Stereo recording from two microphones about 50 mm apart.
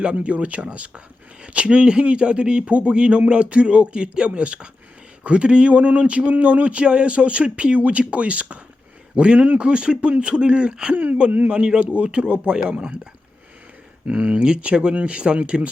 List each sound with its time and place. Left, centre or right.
0.0 s speech: right
10.9 s speech: right
11.5 s speech: centre
14.1 s speech: centre